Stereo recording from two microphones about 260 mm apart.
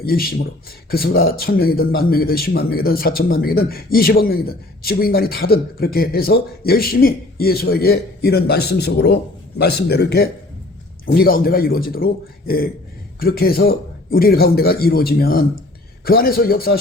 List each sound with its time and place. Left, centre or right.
0.0 s speech: left